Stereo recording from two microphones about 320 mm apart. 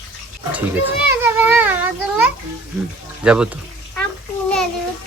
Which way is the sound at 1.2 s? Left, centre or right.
Centre.